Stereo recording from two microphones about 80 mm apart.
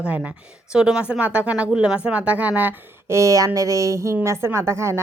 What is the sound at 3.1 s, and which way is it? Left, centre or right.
Speech, right.